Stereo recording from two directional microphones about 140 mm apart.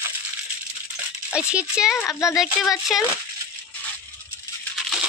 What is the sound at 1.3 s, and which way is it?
Speech, 5° right (ahead or behind).